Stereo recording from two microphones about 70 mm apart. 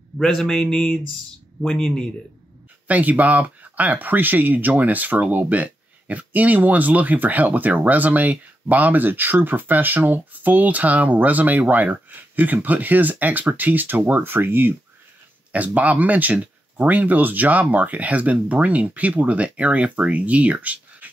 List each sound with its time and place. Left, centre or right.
0.2 s a man's voice: centre
2.9 s speech: right